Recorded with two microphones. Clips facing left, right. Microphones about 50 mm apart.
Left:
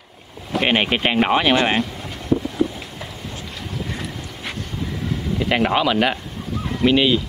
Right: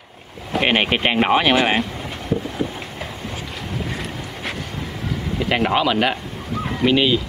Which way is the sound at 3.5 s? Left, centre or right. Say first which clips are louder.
Right 1 dB; centre.